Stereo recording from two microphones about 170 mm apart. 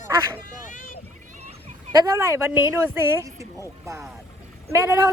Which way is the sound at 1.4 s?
40° right (ahead or behind).